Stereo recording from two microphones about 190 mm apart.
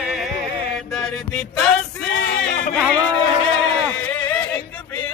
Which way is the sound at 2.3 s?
40° left (ahead or behind).